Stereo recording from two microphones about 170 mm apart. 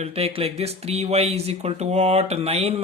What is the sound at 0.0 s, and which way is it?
Speech, 35° right (ahead or behind).